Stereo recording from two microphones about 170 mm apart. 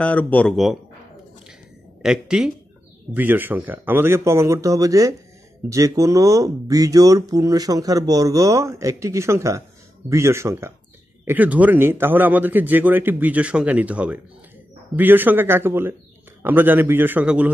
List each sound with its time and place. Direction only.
0.0 s speech: 10° left (ahead or behind)
2.0 s a man's voice: 5° right (ahead or behind)